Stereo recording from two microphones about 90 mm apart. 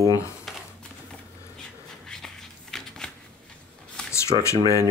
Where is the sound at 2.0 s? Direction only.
5° left (ahead or behind).